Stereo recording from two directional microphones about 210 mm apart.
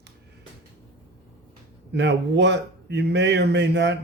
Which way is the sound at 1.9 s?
55° right (ahead or behind).